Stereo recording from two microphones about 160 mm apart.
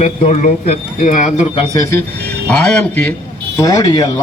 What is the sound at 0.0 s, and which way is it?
A man's voice, 50° left (ahead or behind).